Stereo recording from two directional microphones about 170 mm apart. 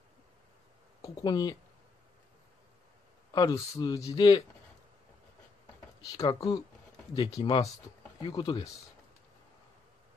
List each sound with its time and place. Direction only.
1.0 s speech: 25° left (ahead or behind)
3.3 s speech: 20° left (ahead or behind)
6.1 s speech: 20° left (ahead or behind)